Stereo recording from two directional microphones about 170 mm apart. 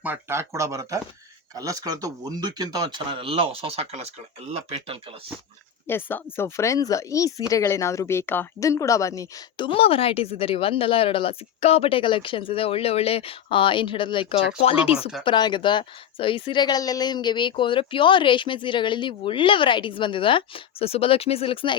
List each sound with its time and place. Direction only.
0.0 s speech: 10° right (ahead or behind); by 4.9 s 40° right (ahead or behind)
5.9 s speech: 10° left (ahead or behind)
9.6 s speech: 35° left (ahead or behind)